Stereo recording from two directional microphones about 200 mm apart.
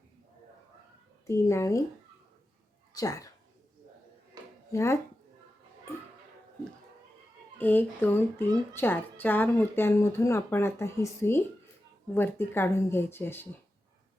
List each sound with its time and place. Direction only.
1.3 s a woman's voice: 15° left (ahead or behind)
2.9 s speech: 15° left (ahead or behind)
4.7 s speech: 15° left (ahead or behind)
7.6 s a woman's voice: 10° left (ahead or behind)